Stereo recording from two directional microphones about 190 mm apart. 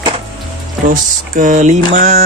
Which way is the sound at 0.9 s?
40° right (ahead or behind).